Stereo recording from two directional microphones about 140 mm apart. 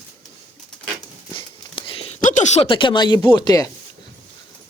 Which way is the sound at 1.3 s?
40° left (ahead or behind).